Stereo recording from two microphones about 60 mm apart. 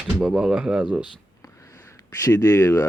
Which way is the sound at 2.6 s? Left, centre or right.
Left.